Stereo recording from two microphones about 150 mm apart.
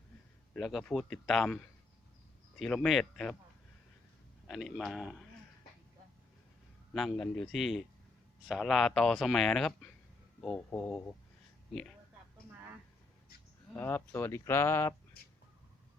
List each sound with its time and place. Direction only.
0.5 s speech: centre (ahead or behind)
2.6 s speech: centre (ahead or behind)
4.4 s speech: centre (ahead or behind)
6.9 s speech: centre (ahead or behind)
13.7 s speech: 15° left (ahead or behind)